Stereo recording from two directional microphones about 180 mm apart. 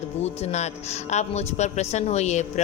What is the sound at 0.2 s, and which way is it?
A man's voice, 40° left (ahead or behind).